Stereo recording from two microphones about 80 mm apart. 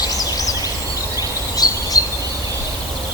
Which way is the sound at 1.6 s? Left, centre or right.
Left.